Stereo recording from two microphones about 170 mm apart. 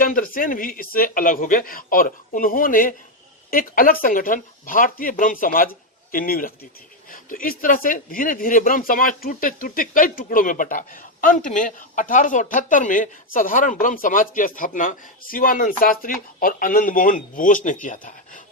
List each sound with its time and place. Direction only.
0.0 s speech: 55° left (ahead or behind)